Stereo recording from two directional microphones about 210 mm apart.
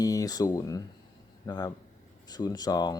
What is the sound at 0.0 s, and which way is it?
Speech, 15° left (ahead or behind).